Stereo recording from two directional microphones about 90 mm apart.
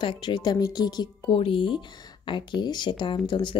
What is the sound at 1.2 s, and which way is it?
A woman's voice, 75° left (ahead or behind).